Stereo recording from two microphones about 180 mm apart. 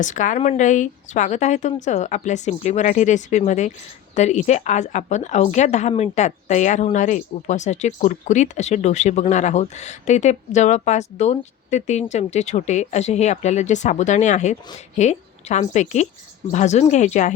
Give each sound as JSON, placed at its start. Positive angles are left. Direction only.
{"t": 0.0, "sound": "a woman's voice", "side_deg": 45}